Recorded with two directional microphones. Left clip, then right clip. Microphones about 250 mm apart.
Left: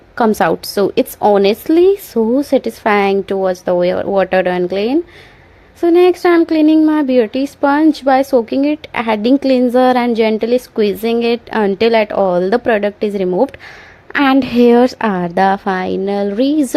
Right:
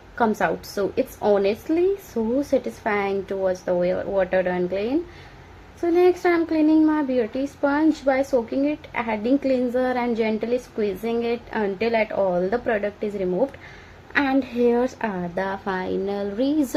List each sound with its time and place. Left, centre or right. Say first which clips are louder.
0.2 s speech: left 9 dB; left